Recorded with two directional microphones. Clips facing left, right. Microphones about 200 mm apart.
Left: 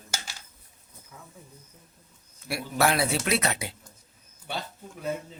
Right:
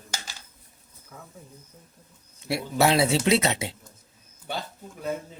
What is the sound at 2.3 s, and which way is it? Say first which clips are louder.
A man's voice: right 3 dB; 25° right (ahead or behind).